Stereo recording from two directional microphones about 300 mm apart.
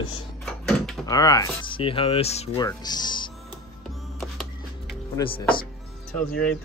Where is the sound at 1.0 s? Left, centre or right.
Centre.